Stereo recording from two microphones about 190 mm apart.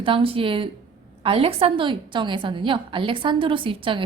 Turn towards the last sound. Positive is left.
turn(degrees=-25)  # may be behind; listen again after turning